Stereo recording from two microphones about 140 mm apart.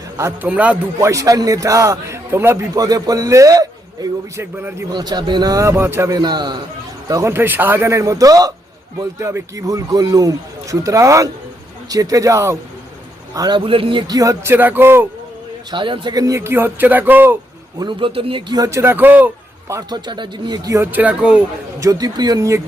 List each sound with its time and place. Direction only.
0.2 s speech: 15° right (ahead or behind)
0.9 s a man's voice: 20° right (ahead or behind); by 14.0 s 40° right (ahead or behind)
14.1 s speech: 25° right (ahead or behind)
15.7 s speech: 35° right (ahead or behind); by 17.3 s 15° right (ahead or behind)
17.7 s a man's voice: 35° right (ahead or behind); by 21.4 s 10° right (ahead or behind)
21.8 s a man's voice: 25° right (ahead or behind)